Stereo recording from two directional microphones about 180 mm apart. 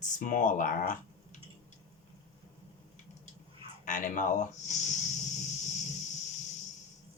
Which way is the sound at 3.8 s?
45° left (ahead or behind).